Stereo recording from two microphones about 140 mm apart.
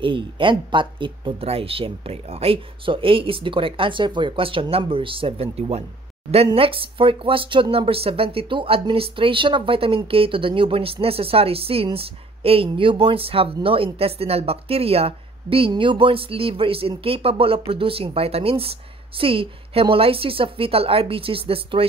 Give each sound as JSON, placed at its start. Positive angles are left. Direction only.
{"t": 0.0, "sound": "speech", "side_deg": -35}